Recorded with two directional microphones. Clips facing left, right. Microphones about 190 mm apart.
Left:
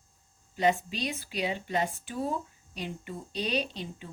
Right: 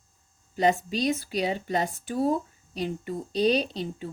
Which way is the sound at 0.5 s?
40° right (ahead or behind).